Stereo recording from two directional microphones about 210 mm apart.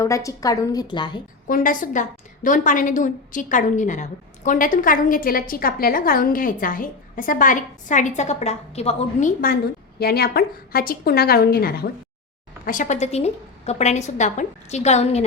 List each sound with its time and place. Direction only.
0.0 s a woman's voice: 15° left (ahead or behind)
1.5 s a woman's voice: 40° left (ahead or behind)
10.0 s a woman's voice: 45° left (ahead or behind); by 15.2 s 30° left (ahead or behind)